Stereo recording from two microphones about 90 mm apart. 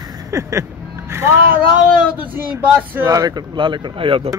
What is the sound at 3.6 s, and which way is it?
Speech, 60° right (ahead or behind).